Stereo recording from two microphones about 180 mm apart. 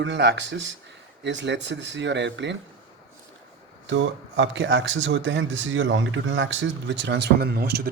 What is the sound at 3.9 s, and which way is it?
Speech, 90° right.